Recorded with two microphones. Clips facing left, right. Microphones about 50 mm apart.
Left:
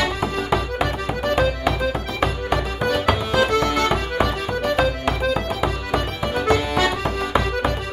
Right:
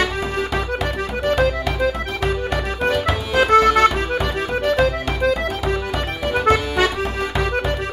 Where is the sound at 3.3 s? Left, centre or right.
Right.